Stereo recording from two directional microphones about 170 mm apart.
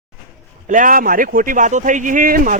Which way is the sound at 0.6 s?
50° right (ahead or behind).